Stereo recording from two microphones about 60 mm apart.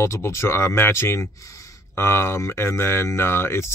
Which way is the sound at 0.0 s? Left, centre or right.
Left.